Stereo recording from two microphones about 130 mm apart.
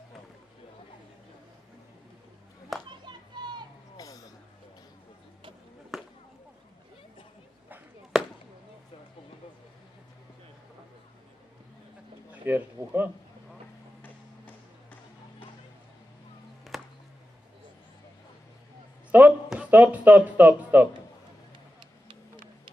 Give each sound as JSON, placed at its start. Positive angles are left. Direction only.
{"t": 2.7, "sound": "a child's voice", "side_deg": 0}
{"t": 3.1, "sound": "children playing", "side_deg": -35}
{"t": 3.9, "sound": "a sound", "side_deg": 25}
{"t": 5.9, "sound": "chop", "side_deg": 0}
{"t": 8.1, "sound": "chop", "side_deg": 0}
{"t": 12.3, "sound": "speech", "side_deg": -15}
{"t": 14.0, "sound": "music", "side_deg": 10}
{"t": 16.7, "sound": "music", "side_deg": 0}
{"t": 19.1, "sound": "a sound", "side_deg": -15}
{"t": 19.5, "sound": "speech", "side_deg": -10}